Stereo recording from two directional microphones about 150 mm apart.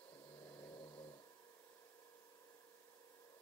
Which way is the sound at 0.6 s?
30° left (ahead or behind).